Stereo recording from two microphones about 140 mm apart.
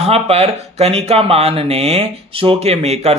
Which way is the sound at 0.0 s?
45° right (ahead or behind).